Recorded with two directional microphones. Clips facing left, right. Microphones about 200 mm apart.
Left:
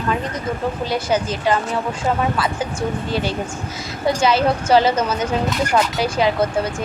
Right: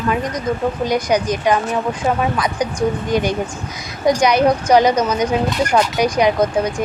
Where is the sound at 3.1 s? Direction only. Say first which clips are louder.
Right 4 dB; 15° right (ahead or behind).